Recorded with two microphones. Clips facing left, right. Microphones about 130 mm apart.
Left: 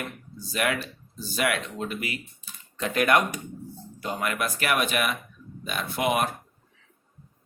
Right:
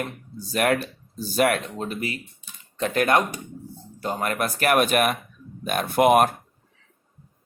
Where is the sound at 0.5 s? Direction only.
45° right (ahead or behind).